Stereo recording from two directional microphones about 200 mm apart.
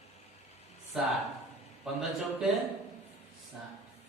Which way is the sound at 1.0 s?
Centre (ahead or behind).